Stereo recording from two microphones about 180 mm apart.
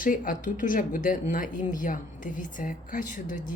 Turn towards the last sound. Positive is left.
turn(degrees=45)  # may be behind; listen again after turning